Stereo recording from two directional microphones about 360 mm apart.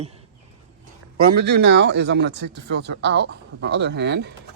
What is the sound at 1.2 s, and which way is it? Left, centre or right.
Speech, right.